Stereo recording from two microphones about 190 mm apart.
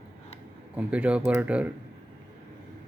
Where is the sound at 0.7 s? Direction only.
5° right (ahead or behind).